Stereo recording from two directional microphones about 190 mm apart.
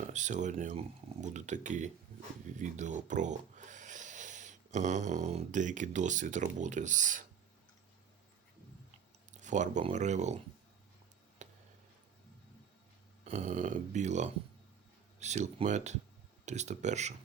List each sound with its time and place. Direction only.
0.1 s speech: 40° right (ahead or behind)
9.3 s speech: 40° right (ahead or behind)
11.4 s a sound: 40° right (ahead or behind)
13.2 s speech: 40° right (ahead or behind)